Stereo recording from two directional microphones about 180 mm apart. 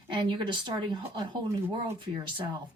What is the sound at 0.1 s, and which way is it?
Speech, 25° right (ahead or behind).